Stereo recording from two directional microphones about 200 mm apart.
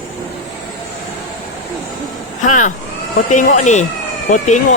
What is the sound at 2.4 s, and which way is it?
Speech, 40° left (ahead or behind).